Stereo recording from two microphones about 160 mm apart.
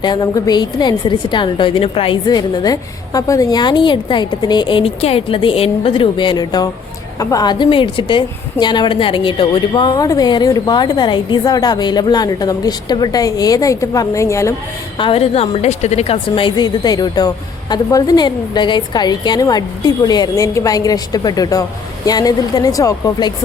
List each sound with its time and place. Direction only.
0.0 s a woman's voice: 25° left (ahead or behind)
14.9 s a woman's voice: 35° left (ahead or behind)